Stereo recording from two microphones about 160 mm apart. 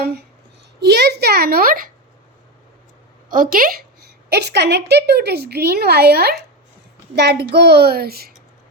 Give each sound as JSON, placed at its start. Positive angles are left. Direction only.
{"t": 0.8, "sound": "a woman's voice", "side_deg": -90}
{"t": 3.2, "sound": "a woman's voice", "side_deg": -60}
{"t": 4.3, "sound": "a woman's voice", "side_deg": -90}